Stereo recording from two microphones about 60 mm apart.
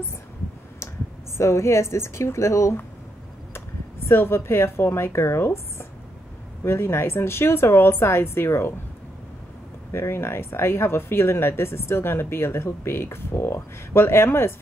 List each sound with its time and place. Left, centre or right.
1.4 s speech: left
4.1 s speech: left
9.9 s speech: left